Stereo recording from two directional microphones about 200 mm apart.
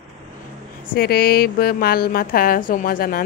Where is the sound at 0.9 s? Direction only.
50° left (ahead or behind).